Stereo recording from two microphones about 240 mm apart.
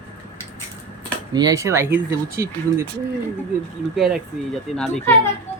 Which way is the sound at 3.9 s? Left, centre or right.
Centre.